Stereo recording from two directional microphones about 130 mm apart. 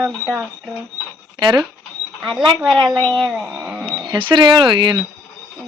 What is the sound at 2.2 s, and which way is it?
Speech, centre (ahead or behind).